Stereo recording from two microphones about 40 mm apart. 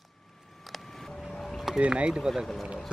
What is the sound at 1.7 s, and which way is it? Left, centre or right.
Speech, right.